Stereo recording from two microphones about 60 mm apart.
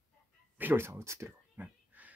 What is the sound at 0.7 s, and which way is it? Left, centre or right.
Speech, right.